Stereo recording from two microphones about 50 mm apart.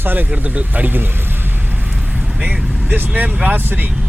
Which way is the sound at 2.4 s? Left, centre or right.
Right.